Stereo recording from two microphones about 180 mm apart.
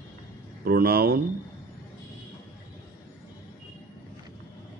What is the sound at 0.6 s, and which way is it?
Speech, 60° right (ahead or behind).